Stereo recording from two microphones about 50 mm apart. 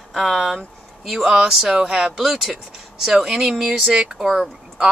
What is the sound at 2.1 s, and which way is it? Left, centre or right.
Speech, centre.